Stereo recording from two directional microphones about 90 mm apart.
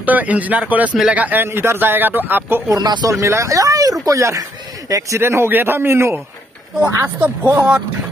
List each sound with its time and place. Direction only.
0.0 s speech: 15° right (ahead or behind)
2.7 s speech: 50° right (ahead or behind)
3.1 s speech: 35° right (ahead or behind)
5.2 s speech: 25° right (ahead or behind)
7.2 s speech: 20° right (ahead or behind)